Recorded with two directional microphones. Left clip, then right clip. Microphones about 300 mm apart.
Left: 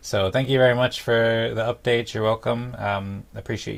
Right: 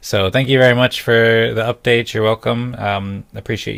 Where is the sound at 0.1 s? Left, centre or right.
Right.